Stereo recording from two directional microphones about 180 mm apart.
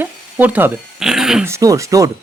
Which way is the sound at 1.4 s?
15° right (ahead or behind).